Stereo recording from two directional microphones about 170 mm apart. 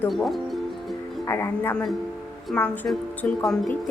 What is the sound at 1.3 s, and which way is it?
Speech, 15° left (ahead or behind).